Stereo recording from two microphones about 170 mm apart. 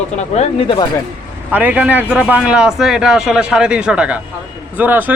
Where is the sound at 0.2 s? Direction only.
40° left (ahead or behind).